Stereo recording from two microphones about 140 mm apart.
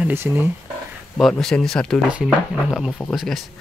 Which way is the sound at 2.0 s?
10° right (ahead or behind).